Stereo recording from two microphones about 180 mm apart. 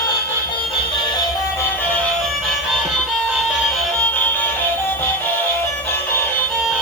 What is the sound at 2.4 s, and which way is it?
Music, centre (ahead or behind).